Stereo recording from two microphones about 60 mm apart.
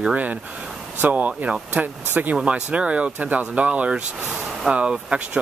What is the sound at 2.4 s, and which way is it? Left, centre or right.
Speech, centre.